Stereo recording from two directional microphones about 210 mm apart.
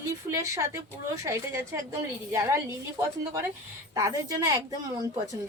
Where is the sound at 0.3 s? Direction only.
15° right (ahead or behind).